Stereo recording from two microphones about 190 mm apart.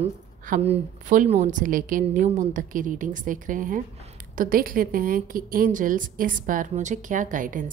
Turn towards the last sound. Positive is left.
turn(degrees=-45)  # may be behind; listen again after turning